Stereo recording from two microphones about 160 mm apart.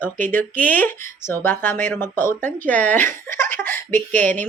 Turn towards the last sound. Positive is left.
turn(degrees=10)  # may be behind; listen again after turning